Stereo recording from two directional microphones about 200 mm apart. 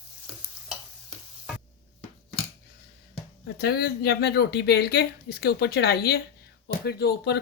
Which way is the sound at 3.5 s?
55° left (ahead or behind).